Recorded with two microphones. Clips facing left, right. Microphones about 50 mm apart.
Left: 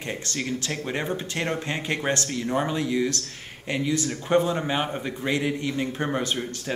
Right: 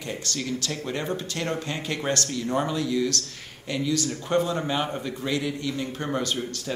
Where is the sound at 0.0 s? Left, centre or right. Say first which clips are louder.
Left 1 dB; left.